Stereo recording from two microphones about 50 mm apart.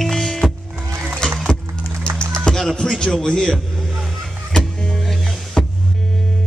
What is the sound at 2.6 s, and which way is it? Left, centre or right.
Speech, centre.